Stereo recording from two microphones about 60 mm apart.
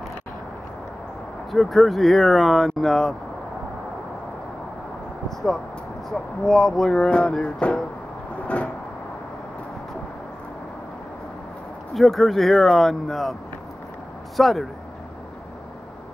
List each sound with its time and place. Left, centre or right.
1.5 s speech: centre
6.0 s speech: centre
7.0 s a sound: centre
11.9 s speech: centre